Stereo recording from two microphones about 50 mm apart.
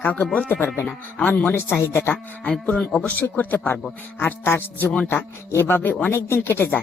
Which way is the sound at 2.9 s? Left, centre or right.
Left.